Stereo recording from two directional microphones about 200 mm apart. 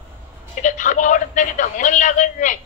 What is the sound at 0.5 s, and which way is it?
Speech, 40° left (ahead or behind).